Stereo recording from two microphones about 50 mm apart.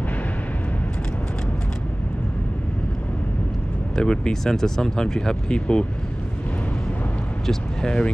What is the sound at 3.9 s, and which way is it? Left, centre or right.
Speech, centre.